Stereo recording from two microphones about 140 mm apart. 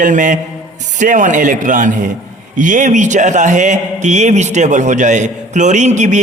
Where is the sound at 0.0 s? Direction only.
65° right (ahead or behind).